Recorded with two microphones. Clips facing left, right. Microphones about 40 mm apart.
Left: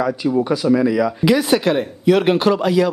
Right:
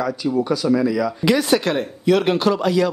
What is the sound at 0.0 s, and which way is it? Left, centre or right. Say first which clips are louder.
Speech: left 3 dB; centre.